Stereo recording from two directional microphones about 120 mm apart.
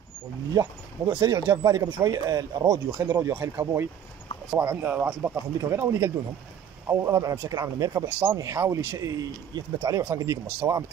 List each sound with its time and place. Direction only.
0.5 s speech: 35° right (ahead or behind)